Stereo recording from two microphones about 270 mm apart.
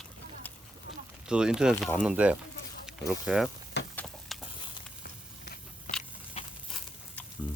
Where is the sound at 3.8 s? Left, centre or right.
Left.